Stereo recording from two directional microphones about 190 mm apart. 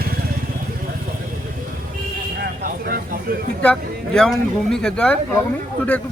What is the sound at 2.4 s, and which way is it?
Vehicle, 55° right (ahead or behind).